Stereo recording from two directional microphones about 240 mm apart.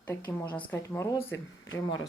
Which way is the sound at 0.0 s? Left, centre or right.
Centre.